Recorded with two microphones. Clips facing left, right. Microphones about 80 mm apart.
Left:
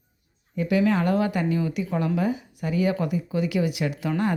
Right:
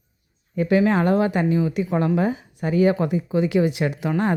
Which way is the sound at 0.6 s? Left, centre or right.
Right.